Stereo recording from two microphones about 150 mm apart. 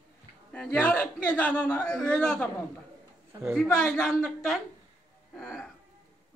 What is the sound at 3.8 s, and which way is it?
A man's voice, 5° left (ahead or behind).